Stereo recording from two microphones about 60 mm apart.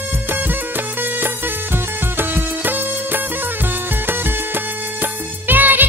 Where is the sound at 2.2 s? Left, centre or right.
Right.